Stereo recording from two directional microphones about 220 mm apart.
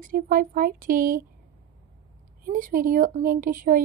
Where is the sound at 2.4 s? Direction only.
40° right (ahead or behind).